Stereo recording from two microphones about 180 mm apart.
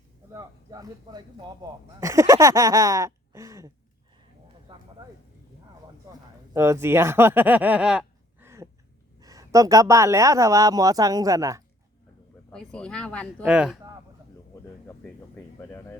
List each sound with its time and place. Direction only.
0.3 s speech: 20° right (ahead or behind)
4.7 s a sound: 25° right (ahead or behind)
6.5 s speech: 15° right (ahead or behind)
12.5 s speech: 5° left (ahead or behind)
13.4 s speech: 5° right (ahead or behind)
15.5 s a sound: 15° left (ahead or behind)